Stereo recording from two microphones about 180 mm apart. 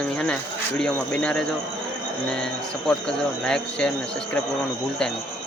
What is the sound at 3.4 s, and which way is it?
Speech, 5° left (ahead or behind).